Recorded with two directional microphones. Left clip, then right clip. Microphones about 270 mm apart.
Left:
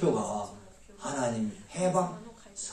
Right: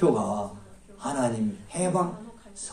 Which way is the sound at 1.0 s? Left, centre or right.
Right.